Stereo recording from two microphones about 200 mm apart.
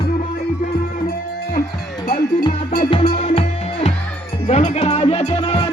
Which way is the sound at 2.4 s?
20° left (ahead or behind).